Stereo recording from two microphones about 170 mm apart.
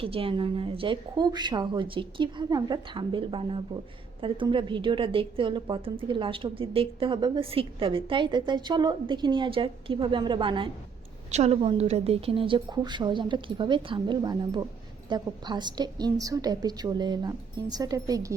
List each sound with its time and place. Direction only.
0.0 s a woman's voice: 35° right (ahead or behind)
11.3 s a woman's voice: 40° right (ahead or behind); by 18.3 s 20° right (ahead or behind)